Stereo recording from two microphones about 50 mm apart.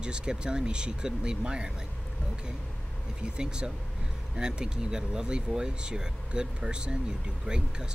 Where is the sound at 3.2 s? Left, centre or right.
Centre.